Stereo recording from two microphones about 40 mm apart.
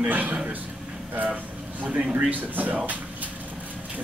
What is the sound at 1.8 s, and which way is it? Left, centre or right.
Speech, right.